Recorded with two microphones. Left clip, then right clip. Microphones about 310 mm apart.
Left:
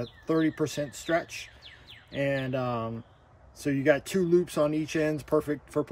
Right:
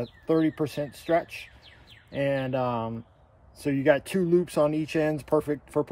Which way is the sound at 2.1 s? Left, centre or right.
Centre.